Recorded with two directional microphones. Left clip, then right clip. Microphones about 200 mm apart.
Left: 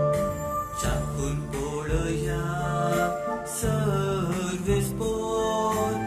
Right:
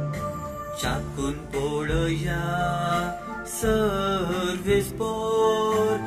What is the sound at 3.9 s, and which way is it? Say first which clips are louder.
Music: right 2 dB; 25° right (ahead or behind).